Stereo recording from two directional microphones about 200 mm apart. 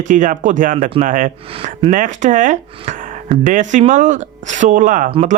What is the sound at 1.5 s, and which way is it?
Speech, 30° right (ahead or behind).